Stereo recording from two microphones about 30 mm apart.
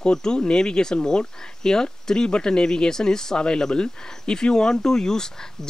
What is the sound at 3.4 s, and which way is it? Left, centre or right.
Speech, left.